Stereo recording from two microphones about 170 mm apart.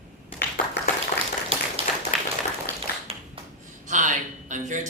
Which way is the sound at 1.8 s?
35° right (ahead or behind).